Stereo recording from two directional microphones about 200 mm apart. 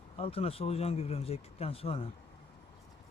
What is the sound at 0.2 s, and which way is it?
Speech, 30° left (ahead or behind).